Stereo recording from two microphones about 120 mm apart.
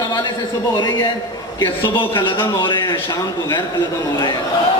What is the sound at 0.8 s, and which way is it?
Speech, 35° left (ahead or behind).